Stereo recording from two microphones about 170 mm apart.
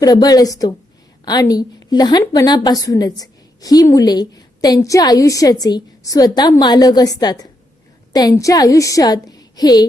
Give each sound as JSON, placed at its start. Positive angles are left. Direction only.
{"t": 0.0, "sound": "a woman's voice", "side_deg": 20}